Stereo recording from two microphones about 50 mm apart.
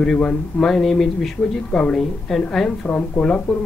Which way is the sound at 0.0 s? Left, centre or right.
Centre.